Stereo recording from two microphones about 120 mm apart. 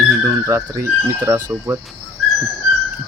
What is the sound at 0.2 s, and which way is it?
Speech, 25° right (ahead or behind).